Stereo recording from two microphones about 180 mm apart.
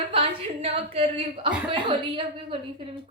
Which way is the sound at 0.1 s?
30° right (ahead or behind).